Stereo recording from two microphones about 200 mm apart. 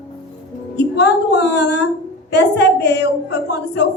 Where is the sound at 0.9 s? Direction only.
60° left (ahead or behind).